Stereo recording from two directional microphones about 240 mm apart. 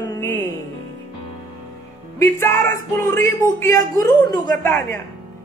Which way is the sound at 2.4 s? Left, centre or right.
Centre.